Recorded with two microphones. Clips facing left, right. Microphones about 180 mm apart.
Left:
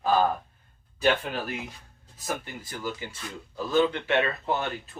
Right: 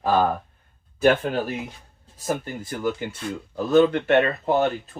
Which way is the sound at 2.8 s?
60° right (ahead or behind).